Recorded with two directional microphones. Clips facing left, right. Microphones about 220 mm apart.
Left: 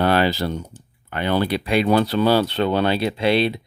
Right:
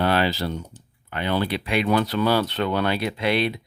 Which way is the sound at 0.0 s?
45° left (ahead or behind).